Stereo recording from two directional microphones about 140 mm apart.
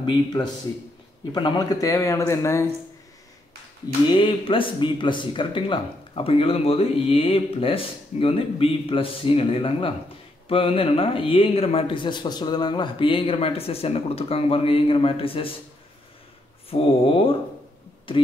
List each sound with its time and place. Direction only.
0.0 s speech: 30° left (ahead or behind)
4.1 s speech: 35° left (ahead or behind)
16.7 s speech: 40° left (ahead or behind)